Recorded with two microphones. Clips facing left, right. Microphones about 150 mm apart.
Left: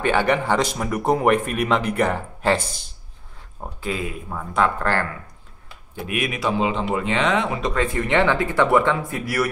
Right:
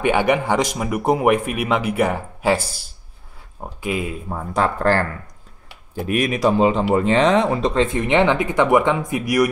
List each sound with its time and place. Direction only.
0.0 s speech: 15° right (ahead or behind)
3.8 s speech: 15° right (ahead or behind)
4.3 s speech: 35° right (ahead or behind); by 9.5 s 15° right (ahead or behind)